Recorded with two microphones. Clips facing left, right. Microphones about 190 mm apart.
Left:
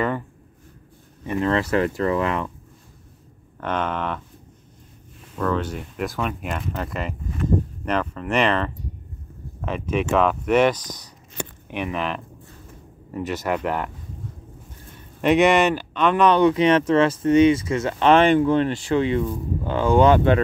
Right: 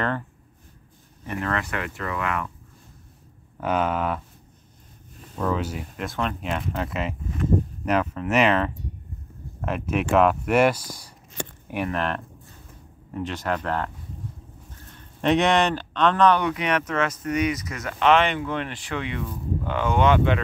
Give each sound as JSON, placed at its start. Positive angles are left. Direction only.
{"t": 1.2, "sound": "speech", "side_deg": 25}
{"t": 3.5, "sound": "speech", "side_deg": -5}
{"t": 5.4, "sound": "speech", "side_deg": -5}
{"t": 15.0, "sound": "speech", "side_deg": 0}
{"t": 16.3, "sound": "speech", "side_deg": 25}